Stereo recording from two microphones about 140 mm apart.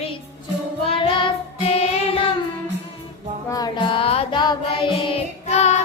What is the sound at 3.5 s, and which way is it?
Music, 25° left (ahead or behind).